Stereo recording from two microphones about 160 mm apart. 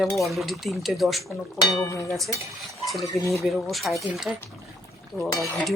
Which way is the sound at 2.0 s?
Centre (ahead or behind).